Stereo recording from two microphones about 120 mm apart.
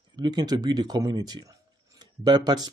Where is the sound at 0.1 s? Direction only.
35° right (ahead or behind).